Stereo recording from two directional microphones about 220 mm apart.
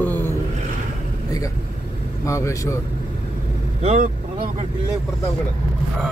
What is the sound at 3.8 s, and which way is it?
Speech, 30° right (ahead or behind).